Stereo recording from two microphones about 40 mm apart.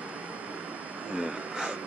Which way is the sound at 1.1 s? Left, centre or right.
Right.